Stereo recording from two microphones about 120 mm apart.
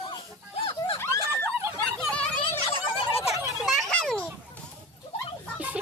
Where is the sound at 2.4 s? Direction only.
45° left (ahead or behind).